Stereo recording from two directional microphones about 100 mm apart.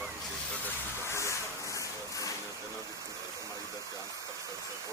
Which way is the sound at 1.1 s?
30° left (ahead or behind).